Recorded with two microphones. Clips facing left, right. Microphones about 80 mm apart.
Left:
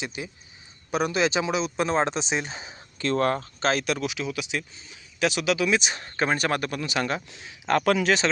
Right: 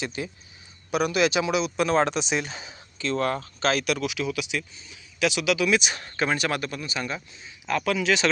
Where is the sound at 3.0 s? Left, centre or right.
Left.